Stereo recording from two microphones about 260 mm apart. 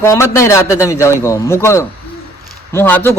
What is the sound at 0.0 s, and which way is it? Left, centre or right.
Speech, centre.